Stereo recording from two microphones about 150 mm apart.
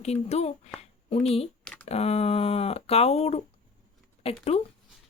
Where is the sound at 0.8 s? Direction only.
40° left (ahead or behind).